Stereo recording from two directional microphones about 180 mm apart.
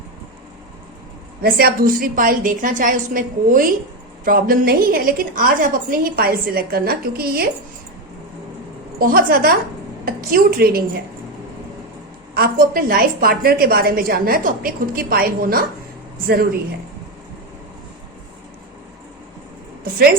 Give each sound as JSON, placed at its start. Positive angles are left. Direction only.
{"t": 1.4, "sound": "a woman's voice", "side_deg": -60}
{"t": 9.0, "sound": "a woman's voice", "side_deg": -55}
{"t": 12.3, "sound": "a woman's voice", "side_deg": -55}
{"t": 19.8, "sound": "a woman's voice", "side_deg": -55}